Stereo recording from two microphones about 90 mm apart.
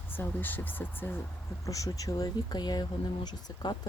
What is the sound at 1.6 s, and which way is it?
Speech, 40° left (ahead or behind).